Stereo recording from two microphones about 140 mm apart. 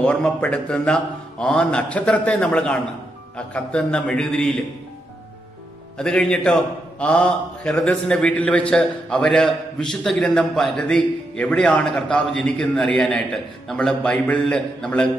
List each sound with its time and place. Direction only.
0.0 s a man's voice: 10° left (ahead or behind)
5.9 s a man's voice: 5° left (ahead or behind)